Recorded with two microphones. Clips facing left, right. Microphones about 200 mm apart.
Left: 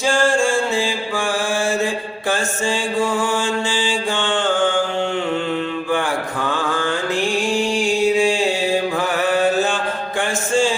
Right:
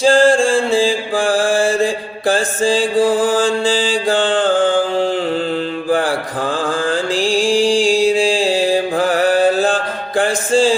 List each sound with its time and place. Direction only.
0.0 s music: 35° right (ahead or behind)
0.8 s mantra: 35° right (ahead or behind)
6.4 s mantra: 35° right (ahead or behind)
7.2 s music: 30° right (ahead or behind)